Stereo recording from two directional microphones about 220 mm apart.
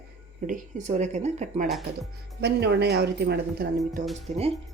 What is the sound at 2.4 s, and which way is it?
Speech, 50° right (ahead or behind).